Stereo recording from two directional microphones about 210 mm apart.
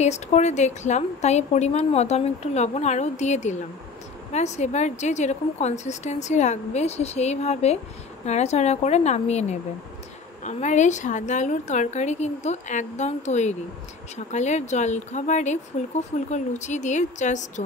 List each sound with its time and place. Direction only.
0.0 s a woman's voice: 35° left (ahead or behind)